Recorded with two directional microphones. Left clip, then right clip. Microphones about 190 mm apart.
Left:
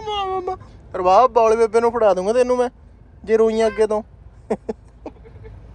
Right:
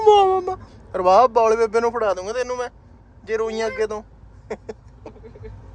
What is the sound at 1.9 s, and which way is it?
Speech, 5° left (ahead or behind).